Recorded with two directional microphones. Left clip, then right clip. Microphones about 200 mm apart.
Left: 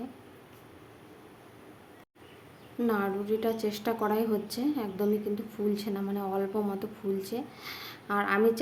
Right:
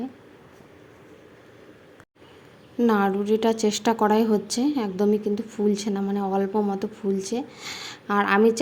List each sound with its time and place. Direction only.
2.7 s speech: 35° right (ahead or behind)